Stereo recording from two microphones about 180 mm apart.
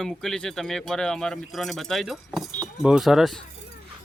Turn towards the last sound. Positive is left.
turn(degrees=0)  # may be behind; listen again after turning